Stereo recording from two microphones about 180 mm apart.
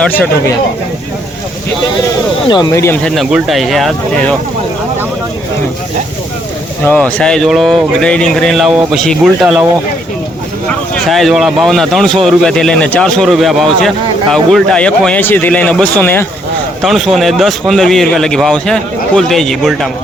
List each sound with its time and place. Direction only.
0.0 s speech: 10° left (ahead or behind)
2.5 s speech: 20° left (ahead or behind)
3.0 s speech: centre (ahead or behind)
6.8 s speech: 5° left (ahead or behind)
10.7 s speech: 5° left (ahead or behind)
16.8 s speech: centre (ahead or behind)